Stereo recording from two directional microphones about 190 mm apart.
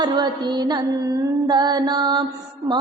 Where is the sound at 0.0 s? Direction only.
25° right (ahead or behind).